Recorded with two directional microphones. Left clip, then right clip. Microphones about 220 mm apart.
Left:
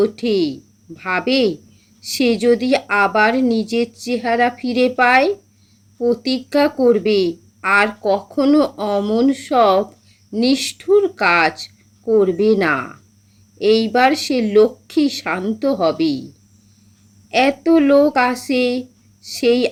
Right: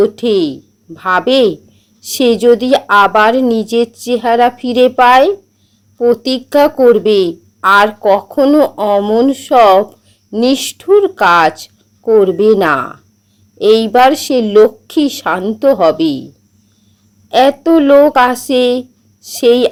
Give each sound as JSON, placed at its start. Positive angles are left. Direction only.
{"t": 0.0, "sound": "a woman's voice", "side_deg": -20}
{"t": 17.2, "sound": "a woman's voice", "side_deg": -20}